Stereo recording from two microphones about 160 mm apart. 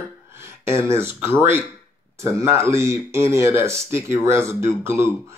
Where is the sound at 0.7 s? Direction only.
15° right (ahead or behind).